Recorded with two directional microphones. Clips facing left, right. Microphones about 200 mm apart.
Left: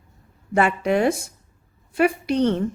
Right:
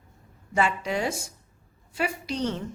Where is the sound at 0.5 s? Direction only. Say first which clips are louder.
Left 6 dB; 60° left (ahead or behind).